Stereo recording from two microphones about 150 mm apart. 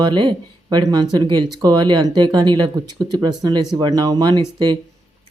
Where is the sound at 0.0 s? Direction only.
30° right (ahead or behind).